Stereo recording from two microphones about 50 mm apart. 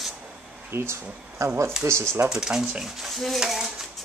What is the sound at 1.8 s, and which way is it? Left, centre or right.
Speech, centre.